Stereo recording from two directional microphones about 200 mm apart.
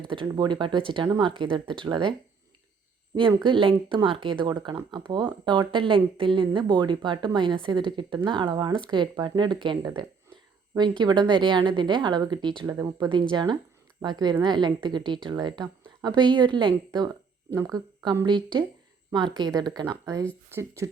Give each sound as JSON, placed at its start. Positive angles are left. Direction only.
{"t": 0.1, "sound": "speech", "side_deg": -20}
{"t": 3.2, "sound": "speech", "side_deg": -25}